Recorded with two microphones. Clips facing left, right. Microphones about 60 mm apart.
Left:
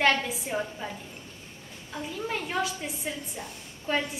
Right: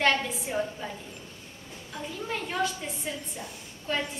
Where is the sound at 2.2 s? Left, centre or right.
Centre.